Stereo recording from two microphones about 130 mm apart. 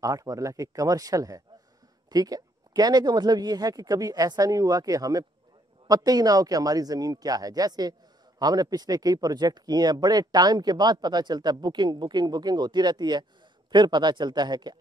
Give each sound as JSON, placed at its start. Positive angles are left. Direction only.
{"t": 0.0, "sound": "speech", "side_deg": -25}